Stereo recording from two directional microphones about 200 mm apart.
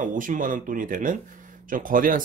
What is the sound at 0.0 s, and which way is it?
Speech, 40° right (ahead or behind).